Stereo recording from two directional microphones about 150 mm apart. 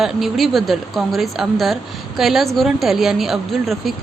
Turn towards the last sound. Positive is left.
turn(degrees=0)  # may be behind; listen again after turning